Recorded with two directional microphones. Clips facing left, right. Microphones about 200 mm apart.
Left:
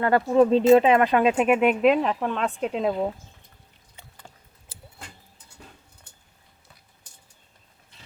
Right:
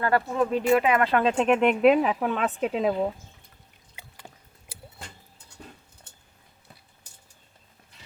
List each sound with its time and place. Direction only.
0.0 s speech: 25° left (ahead or behind); by 1.7 s 5° left (ahead or behind)
1.8 s speech: 5° right (ahead or behind)